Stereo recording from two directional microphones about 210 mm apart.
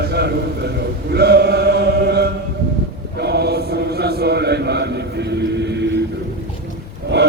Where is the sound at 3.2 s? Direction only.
50° right (ahead or behind).